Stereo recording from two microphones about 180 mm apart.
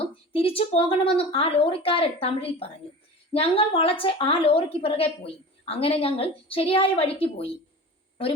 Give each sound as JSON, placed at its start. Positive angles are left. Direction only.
{"t": 0.0, "sound": "a woman's voice", "side_deg": 30}